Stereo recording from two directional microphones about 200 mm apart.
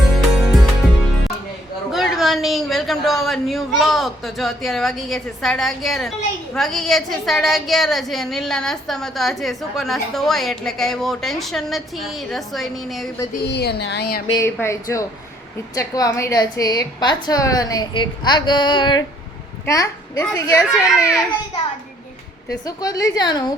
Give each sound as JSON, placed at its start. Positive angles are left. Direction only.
{"t": 1.9, "sound": "a woman's voice", "side_deg": 0}
{"t": 13.5, "sound": "a woman's voice", "side_deg": 55}
{"t": 14.3, "sound": "a child's voice", "side_deg": 15}
{"t": 22.6, "sound": "a woman's voice", "side_deg": 20}